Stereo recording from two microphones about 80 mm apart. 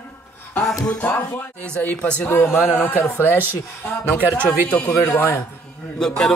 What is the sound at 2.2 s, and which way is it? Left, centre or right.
A man's voice, left.